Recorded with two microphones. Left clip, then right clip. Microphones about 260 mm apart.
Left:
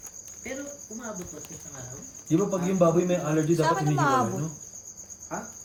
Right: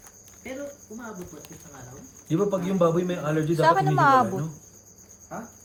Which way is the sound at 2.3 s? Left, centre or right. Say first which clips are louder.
Right 1 dB; centre.